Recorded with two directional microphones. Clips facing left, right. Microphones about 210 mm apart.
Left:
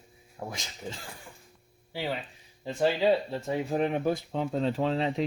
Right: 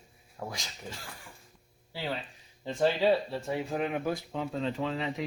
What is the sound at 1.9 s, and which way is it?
Speech, 15° left (ahead or behind).